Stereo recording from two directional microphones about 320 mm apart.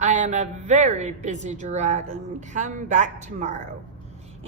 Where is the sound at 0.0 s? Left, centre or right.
Right.